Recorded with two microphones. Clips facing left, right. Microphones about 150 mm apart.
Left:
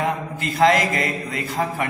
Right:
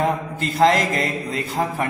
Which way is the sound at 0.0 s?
30° right (ahead or behind).